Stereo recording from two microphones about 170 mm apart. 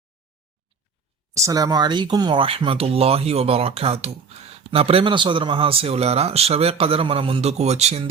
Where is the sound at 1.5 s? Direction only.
20° right (ahead or behind).